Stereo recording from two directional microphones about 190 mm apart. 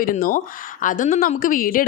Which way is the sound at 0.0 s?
50° left (ahead or behind).